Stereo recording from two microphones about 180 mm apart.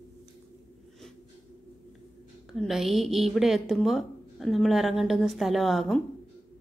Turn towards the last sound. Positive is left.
turn(degrees=0)  # may be behind; listen again after turning